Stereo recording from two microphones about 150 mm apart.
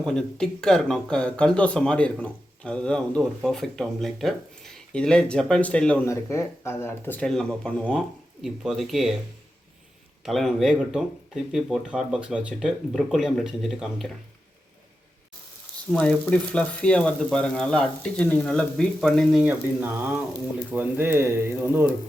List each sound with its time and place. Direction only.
0.0 s speech: 5° left (ahead or behind)
6.1 s speech: 20° left (ahead or behind); by 9.1 s centre (ahead or behind)
10.2 s speech: centre (ahead or behind)
15.9 s speech: 5° left (ahead or behind); by 21.9 s 15° right (ahead or behind)